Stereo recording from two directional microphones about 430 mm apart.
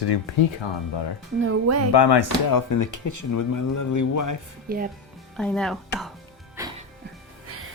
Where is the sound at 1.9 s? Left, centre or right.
Left.